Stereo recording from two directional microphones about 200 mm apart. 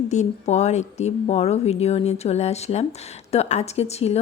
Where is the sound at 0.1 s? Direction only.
35° left (ahead or behind).